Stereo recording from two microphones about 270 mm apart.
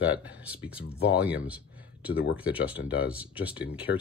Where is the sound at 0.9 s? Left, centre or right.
Left.